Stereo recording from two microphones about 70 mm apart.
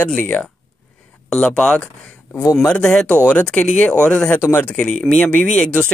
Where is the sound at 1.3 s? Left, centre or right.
Centre.